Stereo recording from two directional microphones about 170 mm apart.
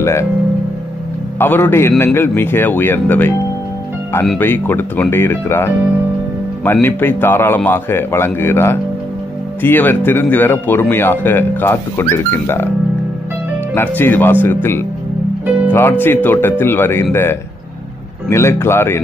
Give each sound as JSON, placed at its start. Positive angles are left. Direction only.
{"t": 0.0, "sound": "speech", "side_deg": 15}
{"t": 1.4, "sound": "speech", "side_deg": 10}
{"t": 4.4, "sound": "speech", "side_deg": 10}
{"t": 13.7, "sound": "speech", "side_deg": 10}